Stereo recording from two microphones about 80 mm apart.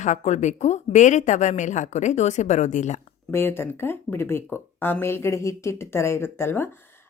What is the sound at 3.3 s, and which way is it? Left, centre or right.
A woman's voice, left.